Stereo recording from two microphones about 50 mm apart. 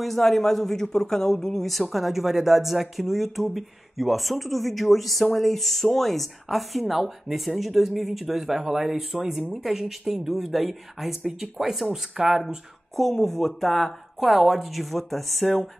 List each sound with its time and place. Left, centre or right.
0.0 s speech: centre
13.0 s speech: centre